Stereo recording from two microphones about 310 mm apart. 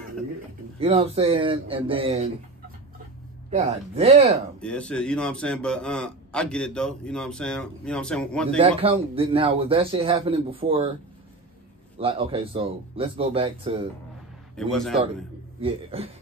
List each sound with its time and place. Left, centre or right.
0.7 s speech: centre
3.4 s speech: right
4.6 s a man's voice: centre
8.5 s a man's voice: centre
12.0 s a man's voice: centre
14.6 s a man's voice: centre
15.6 s speech: centre